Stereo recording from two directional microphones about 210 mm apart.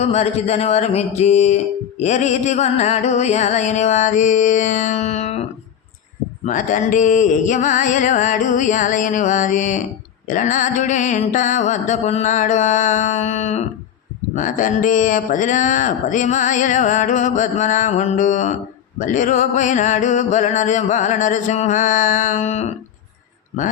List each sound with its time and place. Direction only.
0.0 s music: 30° left (ahead or behind)